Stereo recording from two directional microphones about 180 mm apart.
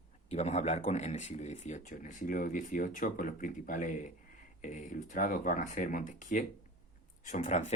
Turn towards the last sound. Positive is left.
turn(degrees=40)  # may be behind; listen again after turning